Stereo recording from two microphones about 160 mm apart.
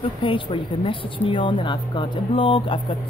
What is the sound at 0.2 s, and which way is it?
A woman's voice, 30° left (ahead or behind).